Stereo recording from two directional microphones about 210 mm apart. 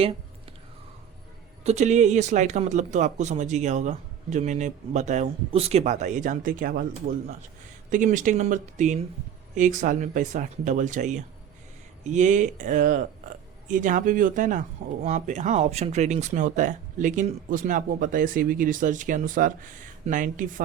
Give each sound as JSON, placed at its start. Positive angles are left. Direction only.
{"t": 1.6, "sound": "speech", "side_deg": -35}
{"t": 7.9, "sound": "speech", "side_deg": -35}